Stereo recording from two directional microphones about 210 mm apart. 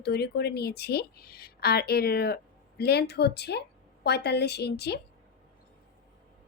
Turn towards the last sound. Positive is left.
turn(degrees=50)  # may be behind; listen again after turning